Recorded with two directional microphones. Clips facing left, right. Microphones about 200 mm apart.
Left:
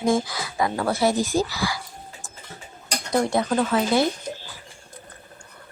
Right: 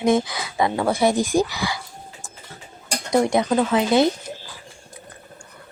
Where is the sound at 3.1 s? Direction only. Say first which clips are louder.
Right 3 dB; 15° right (ahead or behind).